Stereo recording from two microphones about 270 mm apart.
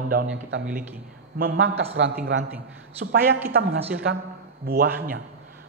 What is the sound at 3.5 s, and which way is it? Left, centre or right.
A man's voice, right.